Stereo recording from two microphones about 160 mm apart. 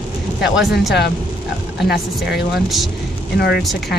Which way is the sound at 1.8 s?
85° left.